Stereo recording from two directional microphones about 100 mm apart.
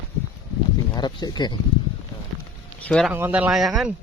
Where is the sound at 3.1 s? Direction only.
15° right (ahead or behind).